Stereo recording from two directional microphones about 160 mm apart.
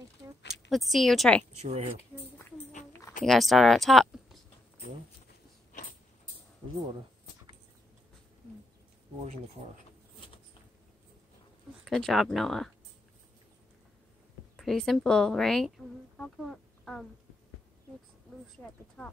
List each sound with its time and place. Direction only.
0.7 s speech: centre (ahead or behind)
1.6 s speech: 40° right (ahead or behind)
3.3 s speech: centre (ahead or behind)
5.7 s a sound: 55° left (ahead or behind)
11.8 s speech: centre (ahead or behind)
14.6 s speech: centre (ahead or behind)
19.0 s speech: 5° left (ahead or behind)